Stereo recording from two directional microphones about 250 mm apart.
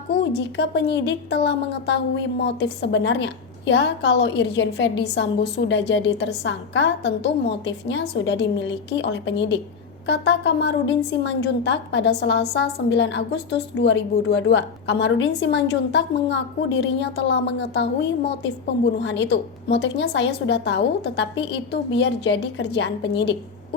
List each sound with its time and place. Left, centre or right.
0.1 s a woman's voice: left